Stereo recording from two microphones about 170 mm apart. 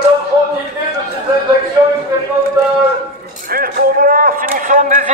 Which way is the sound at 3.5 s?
60° right (ahead or behind).